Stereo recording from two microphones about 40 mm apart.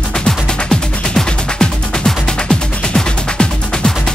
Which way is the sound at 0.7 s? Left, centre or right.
Centre.